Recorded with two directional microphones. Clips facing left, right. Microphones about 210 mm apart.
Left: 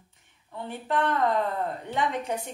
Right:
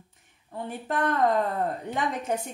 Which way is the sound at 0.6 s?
45° right (ahead or behind).